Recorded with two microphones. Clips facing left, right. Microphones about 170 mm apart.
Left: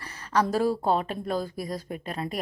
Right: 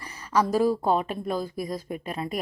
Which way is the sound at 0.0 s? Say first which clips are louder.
Right 1 dB; 10° right (ahead or behind).